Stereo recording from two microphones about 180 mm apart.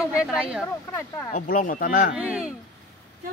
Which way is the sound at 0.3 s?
5° right (ahead or behind).